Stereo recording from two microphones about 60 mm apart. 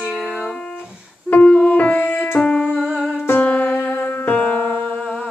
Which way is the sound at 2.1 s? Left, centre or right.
Left.